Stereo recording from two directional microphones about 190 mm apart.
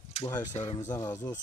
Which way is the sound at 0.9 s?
20° left (ahead or behind).